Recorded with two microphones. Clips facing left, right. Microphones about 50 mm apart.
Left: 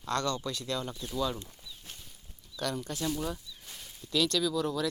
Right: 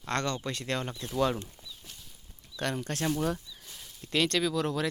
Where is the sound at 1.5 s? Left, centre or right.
Left.